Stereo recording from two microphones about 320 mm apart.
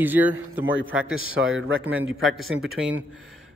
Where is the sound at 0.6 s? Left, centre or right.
Right.